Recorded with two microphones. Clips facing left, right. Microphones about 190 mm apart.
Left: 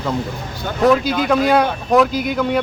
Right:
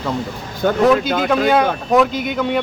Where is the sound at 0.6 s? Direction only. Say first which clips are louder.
Right 10 dB; 55° right (ahead or behind).